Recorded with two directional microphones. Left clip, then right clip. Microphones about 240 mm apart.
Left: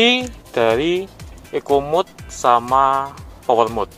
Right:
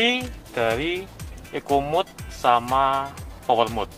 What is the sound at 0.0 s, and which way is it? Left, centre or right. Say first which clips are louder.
Speech: left 7 dB; left.